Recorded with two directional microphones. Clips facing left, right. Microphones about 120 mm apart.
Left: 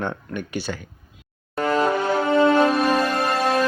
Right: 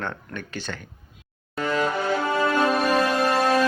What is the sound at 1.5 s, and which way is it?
Music, 45° left (ahead or behind).